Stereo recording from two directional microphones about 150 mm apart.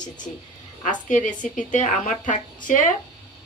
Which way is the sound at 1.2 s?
60° left (ahead or behind).